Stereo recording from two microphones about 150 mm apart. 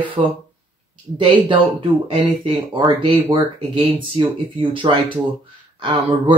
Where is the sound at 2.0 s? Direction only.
35° right (ahead or behind).